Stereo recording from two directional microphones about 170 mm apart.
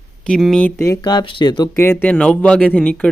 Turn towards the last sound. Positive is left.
turn(degrees=10)  # may be behind; listen again after turning